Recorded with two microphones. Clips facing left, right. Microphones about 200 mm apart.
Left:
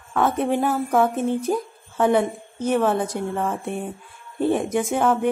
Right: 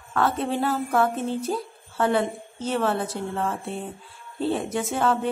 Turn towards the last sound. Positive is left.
turn(degrees=15)  # may be behind; listen again after turning